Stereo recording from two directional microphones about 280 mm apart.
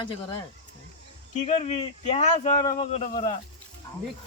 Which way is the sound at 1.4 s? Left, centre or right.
Left.